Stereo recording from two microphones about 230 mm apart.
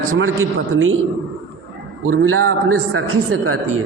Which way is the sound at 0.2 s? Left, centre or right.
Right.